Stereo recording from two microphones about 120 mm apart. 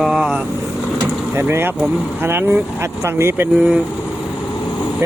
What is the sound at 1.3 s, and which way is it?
Speech, 20° right (ahead or behind).